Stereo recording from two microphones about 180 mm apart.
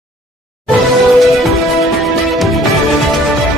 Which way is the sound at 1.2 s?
Centre (ahead or behind).